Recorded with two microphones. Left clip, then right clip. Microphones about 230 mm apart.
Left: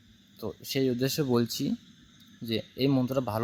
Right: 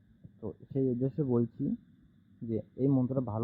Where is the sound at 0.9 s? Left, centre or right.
Left.